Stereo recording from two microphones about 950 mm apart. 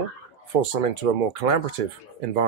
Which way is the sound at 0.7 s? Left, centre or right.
Right.